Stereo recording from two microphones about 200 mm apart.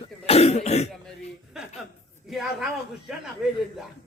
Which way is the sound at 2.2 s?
Centre (ahead or behind).